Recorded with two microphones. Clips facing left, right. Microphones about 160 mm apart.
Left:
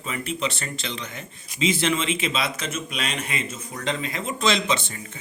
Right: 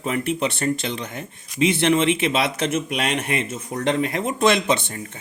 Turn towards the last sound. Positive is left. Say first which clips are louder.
# right 4 dB
turn(degrees=-55)  # may be behind; listen again after turning